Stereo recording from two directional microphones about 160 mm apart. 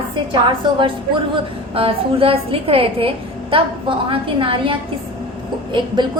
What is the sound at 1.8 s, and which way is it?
A woman's voice, 35° right (ahead or behind).